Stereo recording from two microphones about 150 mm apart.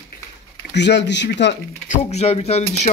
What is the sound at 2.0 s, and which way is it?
Speech, 45° left (ahead or behind).